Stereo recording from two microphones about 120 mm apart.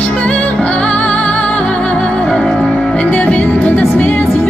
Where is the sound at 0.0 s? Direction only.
10° left (ahead or behind).